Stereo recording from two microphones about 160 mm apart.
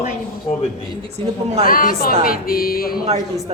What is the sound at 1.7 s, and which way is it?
A woman's voice, 60° left (ahead or behind).